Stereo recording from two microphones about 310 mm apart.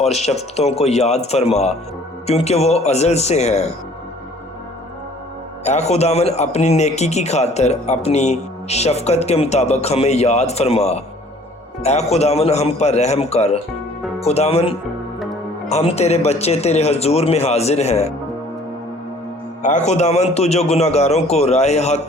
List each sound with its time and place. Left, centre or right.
0.0 s a man's voice: centre
5.6 s a man's voice: left
15.2 s music: centre
15.7 s a man's voice: centre
19.6 s a man's voice: left